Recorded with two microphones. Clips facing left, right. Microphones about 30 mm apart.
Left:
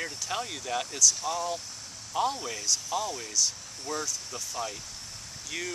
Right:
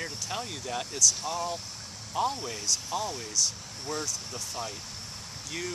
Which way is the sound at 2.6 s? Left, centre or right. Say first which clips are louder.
Left 1 dB; centre.